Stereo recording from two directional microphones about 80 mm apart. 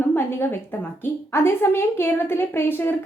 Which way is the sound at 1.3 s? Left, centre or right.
Left.